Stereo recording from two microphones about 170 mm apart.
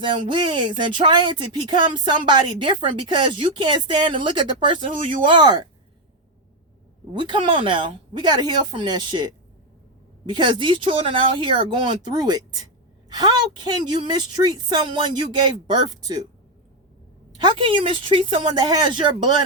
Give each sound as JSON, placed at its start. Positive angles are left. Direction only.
{"t": 0.0, "sound": "speech", "side_deg": -30}
{"t": 7.1, "sound": "speech", "side_deg": -30}
{"t": 17.3, "sound": "speech", "side_deg": -30}